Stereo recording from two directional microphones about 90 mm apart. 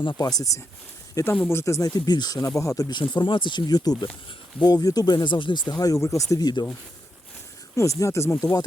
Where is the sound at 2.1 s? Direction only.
50° left (ahead or behind).